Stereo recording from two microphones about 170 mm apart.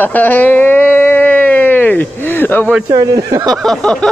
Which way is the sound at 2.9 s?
20° right (ahead or behind).